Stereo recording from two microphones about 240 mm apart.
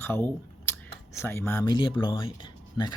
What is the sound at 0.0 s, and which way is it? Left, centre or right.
Speech, centre.